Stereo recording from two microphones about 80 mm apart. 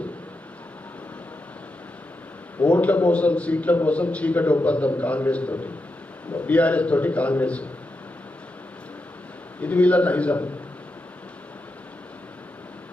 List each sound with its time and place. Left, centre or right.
2.6 s a man's voice: centre
9.6 s a man's voice: centre